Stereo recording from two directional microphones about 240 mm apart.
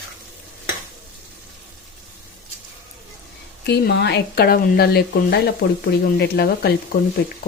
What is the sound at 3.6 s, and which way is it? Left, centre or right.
Speech, left.